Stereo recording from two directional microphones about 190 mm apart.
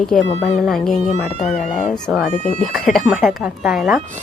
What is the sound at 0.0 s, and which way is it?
Speech, centre (ahead or behind).